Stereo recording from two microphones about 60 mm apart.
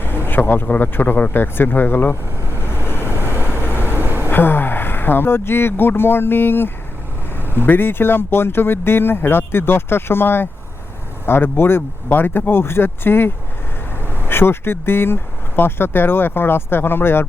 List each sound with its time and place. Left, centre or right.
0.3 s speech: left
1.3 s vehicle: left
3.1 s vehicle: right
3.6 s vehicle: left
3.9 s a sound: right
4.3 s speech: left